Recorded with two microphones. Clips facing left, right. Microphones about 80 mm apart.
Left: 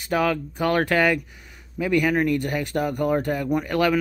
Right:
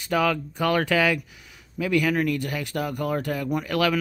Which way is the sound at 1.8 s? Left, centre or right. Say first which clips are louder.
Left 2 dB; left.